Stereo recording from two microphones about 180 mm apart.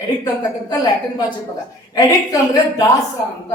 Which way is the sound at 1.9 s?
20° left (ahead or behind).